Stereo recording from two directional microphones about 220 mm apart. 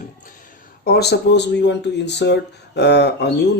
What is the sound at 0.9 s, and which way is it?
Speech, 45° left (ahead or behind).